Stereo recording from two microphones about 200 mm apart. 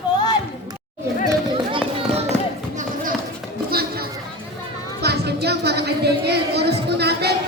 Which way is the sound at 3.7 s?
50° right (ahead or behind).